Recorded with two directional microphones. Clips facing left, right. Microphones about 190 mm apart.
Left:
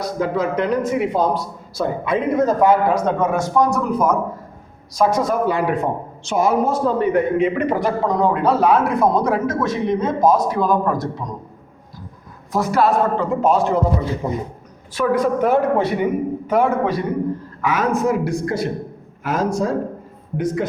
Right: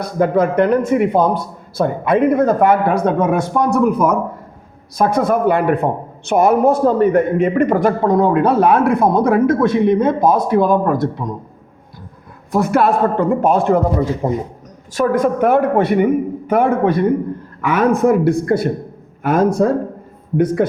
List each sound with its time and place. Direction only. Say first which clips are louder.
0.0 s speech: right 5 dB; 55° right (ahead or behind)
12.5 s speech: right 3 dB; 60° right (ahead or behind)